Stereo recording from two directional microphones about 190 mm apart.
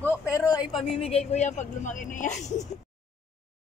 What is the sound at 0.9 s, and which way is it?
Speech, 30° left (ahead or behind).